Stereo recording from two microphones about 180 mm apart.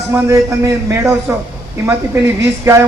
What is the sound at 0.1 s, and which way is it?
Speech, 15° right (ahead or behind).